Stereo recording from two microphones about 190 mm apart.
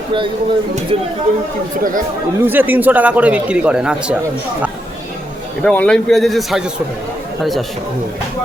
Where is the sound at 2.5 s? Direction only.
10° right (ahead or behind).